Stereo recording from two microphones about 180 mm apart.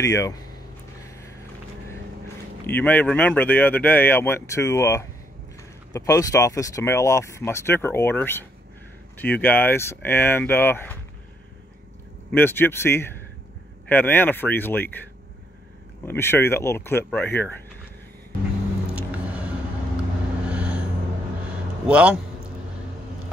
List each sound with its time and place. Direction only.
0.0 s speech: 15° left (ahead or behind)
2.6 s speech: 10° left (ahead or behind)
12.3 s speech: 10° left (ahead or behind)
16.1 s speech: 15° left (ahead or behind)
18.9 s music: 10° right (ahead or behind)
20.4 s vehicle: 5° right (ahead or behind)
21.8 s a man's voice: 5° right (ahead or behind)